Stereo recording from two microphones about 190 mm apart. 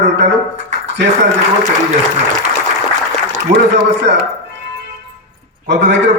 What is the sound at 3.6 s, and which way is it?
Speech, 65° right (ahead or behind).